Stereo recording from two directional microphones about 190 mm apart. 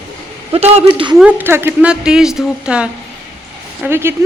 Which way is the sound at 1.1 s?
5° right (ahead or behind).